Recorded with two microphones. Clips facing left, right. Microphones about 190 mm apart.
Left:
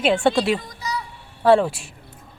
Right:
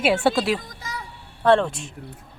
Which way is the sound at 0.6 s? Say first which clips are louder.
Left 6 dB; 50° right (ahead or behind).